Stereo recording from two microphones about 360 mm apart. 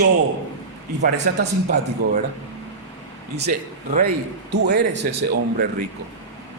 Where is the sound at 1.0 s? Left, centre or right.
Right.